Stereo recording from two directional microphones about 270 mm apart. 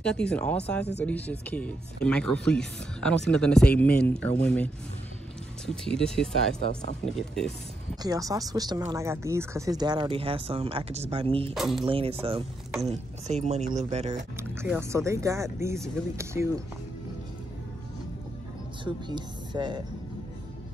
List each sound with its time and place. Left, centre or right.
0.0 s speech: centre
5.7 s speech: centre
8.0 s speech: centre
11.5 s speech: centre
11.8 s speech: right
14.5 s speech: centre
18.9 s speech: centre